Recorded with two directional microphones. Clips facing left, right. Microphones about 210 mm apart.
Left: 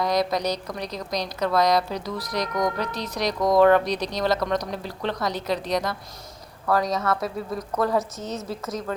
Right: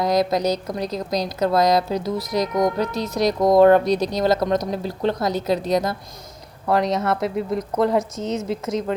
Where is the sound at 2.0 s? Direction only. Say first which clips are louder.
Right 6 dB; 25° right (ahead or behind).